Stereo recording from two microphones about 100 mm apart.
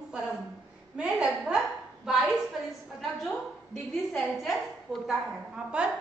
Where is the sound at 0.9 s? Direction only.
10° right (ahead or behind).